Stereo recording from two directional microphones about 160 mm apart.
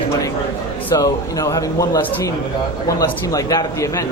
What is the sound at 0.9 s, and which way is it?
A man's voice, 20° left (ahead or behind).